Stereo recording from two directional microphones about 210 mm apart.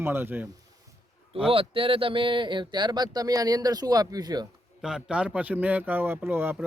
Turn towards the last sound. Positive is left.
turn(degrees=-10)  # may be behind; listen again after turning